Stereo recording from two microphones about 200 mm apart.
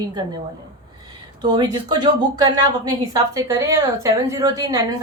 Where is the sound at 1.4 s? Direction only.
20° right (ahead or behind).